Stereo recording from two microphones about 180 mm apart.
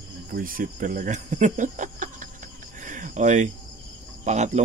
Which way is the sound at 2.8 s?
45° right (ahead or behind).